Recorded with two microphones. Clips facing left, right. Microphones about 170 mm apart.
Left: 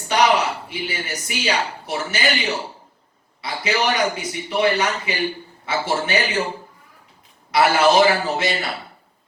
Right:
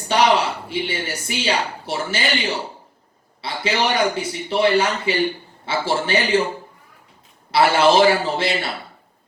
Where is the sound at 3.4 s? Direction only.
30° right (ahead or behind).